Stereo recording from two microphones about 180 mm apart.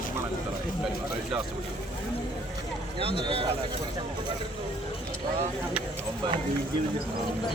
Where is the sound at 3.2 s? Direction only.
30° right (ahead or behind).